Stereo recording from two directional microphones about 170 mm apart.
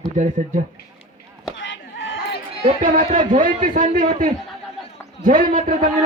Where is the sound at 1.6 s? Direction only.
90° left.